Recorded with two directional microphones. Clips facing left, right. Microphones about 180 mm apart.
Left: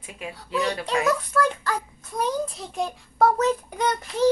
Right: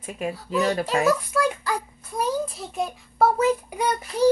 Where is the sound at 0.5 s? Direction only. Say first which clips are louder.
Right 3 dB; 45° right (ahead or behind).